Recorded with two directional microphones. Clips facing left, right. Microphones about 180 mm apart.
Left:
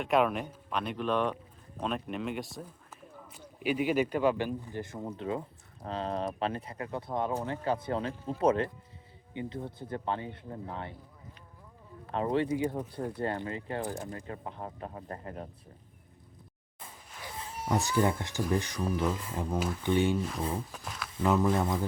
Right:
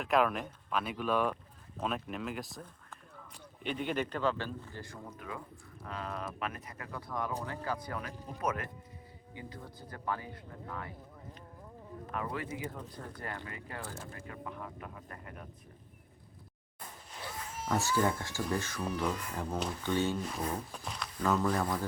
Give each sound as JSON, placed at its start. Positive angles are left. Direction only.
{"t": 0.0, "sound": "speech", "side_deg": 0}
{"t": 12.1, "sound": "speech", "side_deg": 30}
{"t": 17.3, "sound": "a sound", "side_deg": 30}
{"t": 17.7, "sound": "speech", "side_deg": 15}
{"t": 18.9, "sound": "speech", "side_deg": 5}
{"t": 19.1, "sound": "speech", "side_deg": 20}
{"t": 20.7, "sound": "speech", "side_deg": 0}
{"t": 21.2, "sound": "speech", "side_deg": 20}